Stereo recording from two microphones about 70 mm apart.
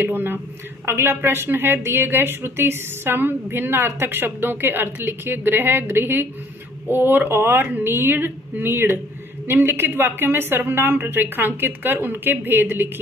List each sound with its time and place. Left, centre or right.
0.0 s a woman's voice: right